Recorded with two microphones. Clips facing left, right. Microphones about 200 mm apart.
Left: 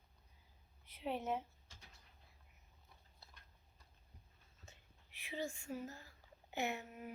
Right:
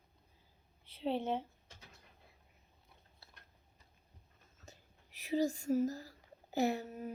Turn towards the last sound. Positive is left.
turn(degrees=-40)  # may be behind; listen again after turning